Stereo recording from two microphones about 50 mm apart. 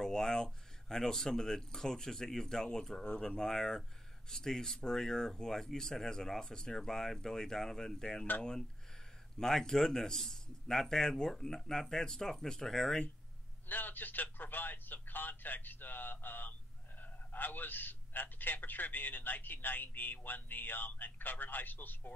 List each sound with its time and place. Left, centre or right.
0.0 s speech: centre
13.7 s a man's voice: left